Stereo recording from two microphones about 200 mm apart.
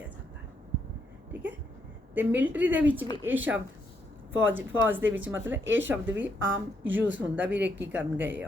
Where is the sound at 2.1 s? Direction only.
10° right (ahead or behind).